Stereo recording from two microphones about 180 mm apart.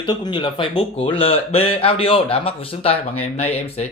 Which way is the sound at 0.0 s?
25° left (ahead or behind).